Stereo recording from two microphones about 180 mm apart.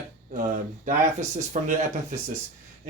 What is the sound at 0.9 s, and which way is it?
Speech, 40° right (ahead or behind).